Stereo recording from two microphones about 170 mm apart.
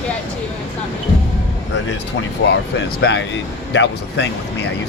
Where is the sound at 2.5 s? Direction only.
90° left.